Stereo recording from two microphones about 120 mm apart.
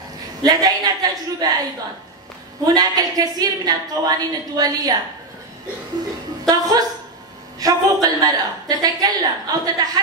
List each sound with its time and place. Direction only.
0.4 s a woman's voice: 35° right (ahead or behind)
2.6 s a woman's voice: 30° right (ahead or behind)
6.4 s a sound: 35° right (ahead or behind)
7.6 s a woman's voice: 30° right (ahead or behind)